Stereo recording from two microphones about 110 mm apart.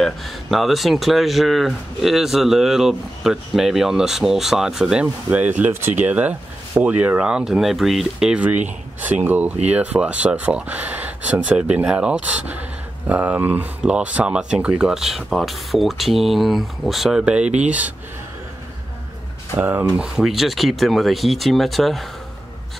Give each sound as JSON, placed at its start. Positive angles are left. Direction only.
{"t": 0.0, "sound": "speech", "side_deg": 0}
{"t": 19.5, "sound": "speech", "side_deg": -20}
{"t": 20.2, "sound": "speech", "side_deg": 0}